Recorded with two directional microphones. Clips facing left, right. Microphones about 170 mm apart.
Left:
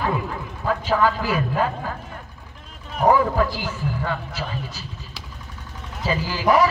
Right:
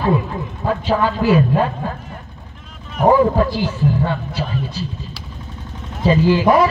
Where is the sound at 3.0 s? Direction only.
40° right (ahead or behind).